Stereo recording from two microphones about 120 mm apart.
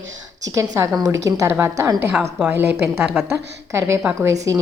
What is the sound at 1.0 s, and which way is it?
A woman's voice, 30° right (ahead or behind).